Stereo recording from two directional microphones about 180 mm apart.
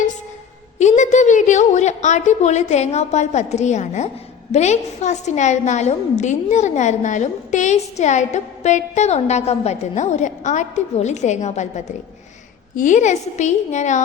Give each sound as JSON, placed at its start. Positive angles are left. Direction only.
{"t": 0.8, "sound": "a woman's voice", "side_deg": 40}
{"t": 12.7, "sound": "a woman's voice", "side_deg": 45}